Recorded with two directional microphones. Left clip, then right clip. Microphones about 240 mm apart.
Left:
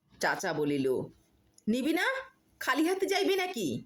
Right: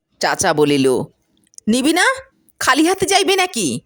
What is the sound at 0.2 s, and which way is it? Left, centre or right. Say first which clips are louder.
Speech: right 15 dB; right.